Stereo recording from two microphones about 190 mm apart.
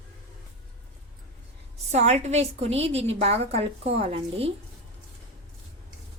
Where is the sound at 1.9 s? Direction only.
35° right (ahead or behind).